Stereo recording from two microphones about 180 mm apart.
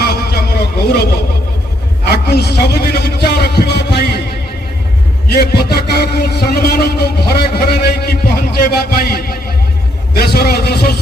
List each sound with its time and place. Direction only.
0.0 s a sound: 60° left (ahead or behind)
2.0 s a man's voice: 65° left (ahead or behind)
5.3 s a man's voice: 60° left (ahead or behind)